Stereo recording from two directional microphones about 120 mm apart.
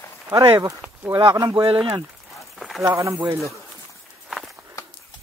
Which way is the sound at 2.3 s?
Centre (ahead or behind).